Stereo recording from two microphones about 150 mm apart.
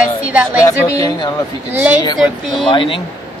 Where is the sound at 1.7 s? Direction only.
10° right (ahead or behind).